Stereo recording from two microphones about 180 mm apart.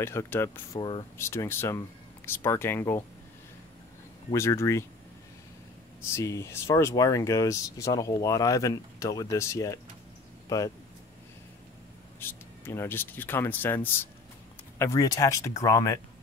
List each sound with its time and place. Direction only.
0.0 s speech: 15° left (ahead or behind)
0.7 s speech: 25° left (ahead or behind)
1.1 s speech: 15° left (ahead or behind)
4.3 s speech: 15° left (ahead or behind)
6.1 s speech: 15° left (ahead or behind)
12.2 s speech: 10° left (ahead or behind)